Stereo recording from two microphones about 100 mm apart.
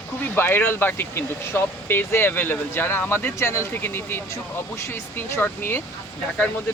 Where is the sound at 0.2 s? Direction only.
20° left (ahead or behind).